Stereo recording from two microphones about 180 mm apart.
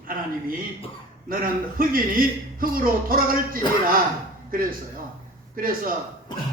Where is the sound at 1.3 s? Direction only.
50° right (ahead or behind).